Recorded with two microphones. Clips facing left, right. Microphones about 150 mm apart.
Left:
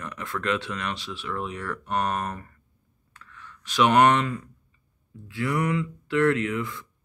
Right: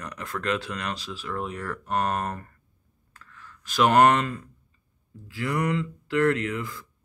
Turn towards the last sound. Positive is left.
turn(degrees=-35)  # may be behind; listen again after turning